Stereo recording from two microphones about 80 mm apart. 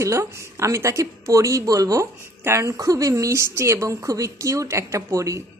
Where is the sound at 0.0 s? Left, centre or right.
Right.